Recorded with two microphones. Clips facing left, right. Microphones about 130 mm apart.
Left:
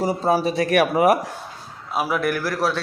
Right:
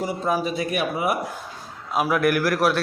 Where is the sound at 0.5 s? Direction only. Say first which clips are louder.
Left 6 dB; 80° left.